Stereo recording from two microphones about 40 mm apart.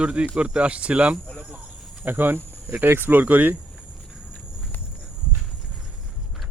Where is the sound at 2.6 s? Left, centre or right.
Right.